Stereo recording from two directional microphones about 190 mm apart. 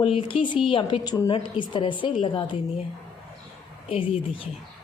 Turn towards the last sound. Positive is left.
turn(degrees=30)  # may be behind; listen again after turning